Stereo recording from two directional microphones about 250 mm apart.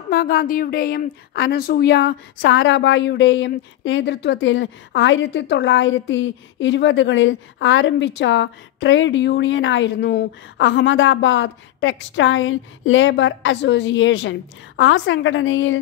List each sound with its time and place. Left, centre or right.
0.1 s a woman's voice: left